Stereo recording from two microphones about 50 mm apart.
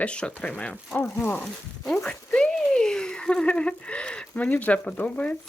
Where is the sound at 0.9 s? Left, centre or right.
Left.